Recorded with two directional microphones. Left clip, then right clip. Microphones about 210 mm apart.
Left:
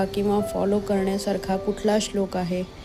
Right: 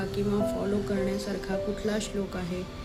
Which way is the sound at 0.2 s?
35° left (ahead or behind).